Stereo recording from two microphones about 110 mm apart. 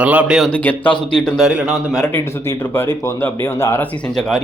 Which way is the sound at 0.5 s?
15° left (ahead or behind).